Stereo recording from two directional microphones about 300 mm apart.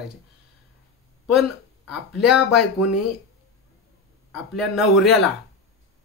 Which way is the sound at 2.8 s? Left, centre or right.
Left.